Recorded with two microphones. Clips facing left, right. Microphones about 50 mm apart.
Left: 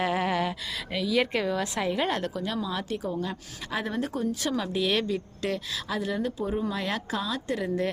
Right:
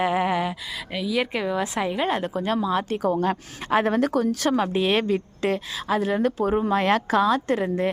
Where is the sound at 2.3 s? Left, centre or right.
Right.